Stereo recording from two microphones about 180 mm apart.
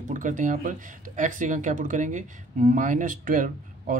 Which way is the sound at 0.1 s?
45° right (ahead or behind).